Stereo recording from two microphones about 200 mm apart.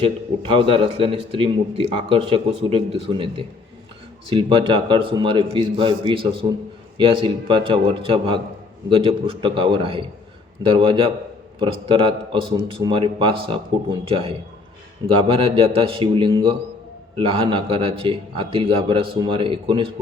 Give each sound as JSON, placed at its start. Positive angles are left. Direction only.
{"t": 0.0, "sound": "a man's voice", "side_deg": -25}